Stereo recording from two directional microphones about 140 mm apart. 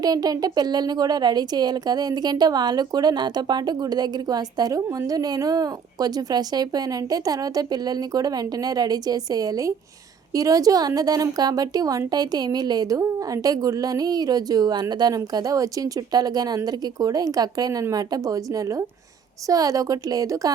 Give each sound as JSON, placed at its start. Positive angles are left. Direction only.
{"t": 0.0, "sound": "speech", "side_deg": -25}